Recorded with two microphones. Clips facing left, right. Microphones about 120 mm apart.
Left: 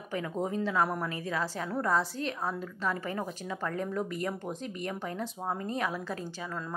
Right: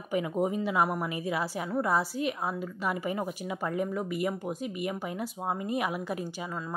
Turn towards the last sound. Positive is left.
turn(degrees=-15)  # may be behind; listen again after turning